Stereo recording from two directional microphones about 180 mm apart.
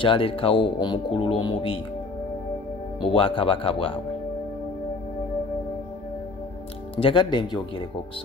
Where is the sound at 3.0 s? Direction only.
30° left (ahead or behind).